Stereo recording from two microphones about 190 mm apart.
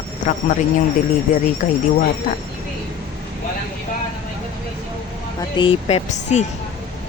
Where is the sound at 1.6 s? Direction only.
45° left (ahead or behind).